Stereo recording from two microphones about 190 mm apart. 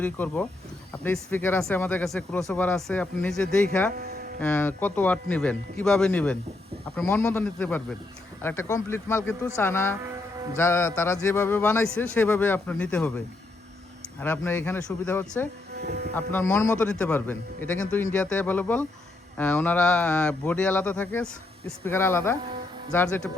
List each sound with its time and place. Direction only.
0.0 s speech: 10° left (ahead or behind)
10.0 s music: 15° right (ahead or behind)
10.6 s speech: 15° left (ahead or behind)
15.7 s a sound: 60° right (ahead or behind)
16.1 s speech: 10° left (ahead or behind)